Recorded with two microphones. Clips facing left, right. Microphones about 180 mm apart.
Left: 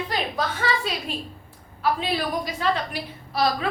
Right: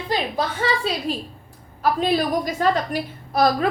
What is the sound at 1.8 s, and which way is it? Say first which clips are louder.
A woman's voice: right 5 dB; 45° right (ahead or behind).